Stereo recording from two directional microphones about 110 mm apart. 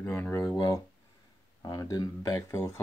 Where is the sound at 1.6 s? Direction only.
35° left (ahead or behind).